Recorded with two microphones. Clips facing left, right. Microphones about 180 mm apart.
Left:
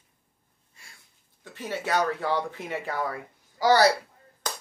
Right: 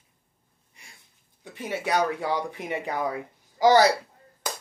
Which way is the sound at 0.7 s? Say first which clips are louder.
Right 1 dB; 15° right (ahead or behind).